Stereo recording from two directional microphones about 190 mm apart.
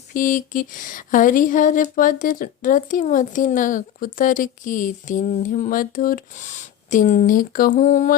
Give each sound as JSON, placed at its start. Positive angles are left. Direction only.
{"t": 0.1, "sound": "speech", "side_deg": 45}